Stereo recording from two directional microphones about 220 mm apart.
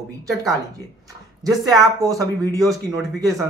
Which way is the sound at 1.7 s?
15° right (ahead or behind).